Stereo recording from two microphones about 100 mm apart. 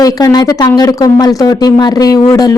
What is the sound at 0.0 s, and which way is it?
Speech, 40° left (ahead or behind).